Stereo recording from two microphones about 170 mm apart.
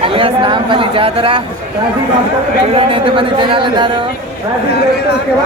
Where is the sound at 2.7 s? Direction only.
30° right (ahead or behind).